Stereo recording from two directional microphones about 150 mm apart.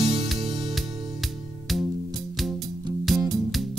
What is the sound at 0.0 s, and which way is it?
Music, 35° right (ahead or behind).